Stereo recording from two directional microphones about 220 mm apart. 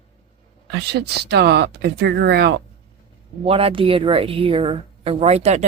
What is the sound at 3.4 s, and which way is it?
A woman's voice, 25° right (ahead or behind).